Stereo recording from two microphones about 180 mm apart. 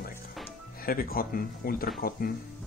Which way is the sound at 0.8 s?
55° left (ahead or behind).